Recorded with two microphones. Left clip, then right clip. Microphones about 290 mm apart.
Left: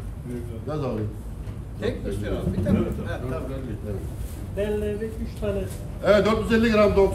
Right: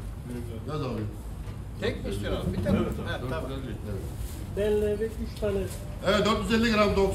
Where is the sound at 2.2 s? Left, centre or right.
Right.